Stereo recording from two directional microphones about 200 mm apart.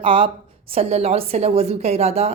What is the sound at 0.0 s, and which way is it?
A woman's voice, 25° right (ahead or behind).